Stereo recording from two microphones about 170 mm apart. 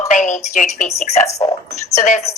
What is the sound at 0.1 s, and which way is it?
A woman's voice, 45° left (ahead or behind).